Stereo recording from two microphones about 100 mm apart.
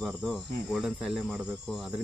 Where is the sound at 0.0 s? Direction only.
Centre (ahead or behind).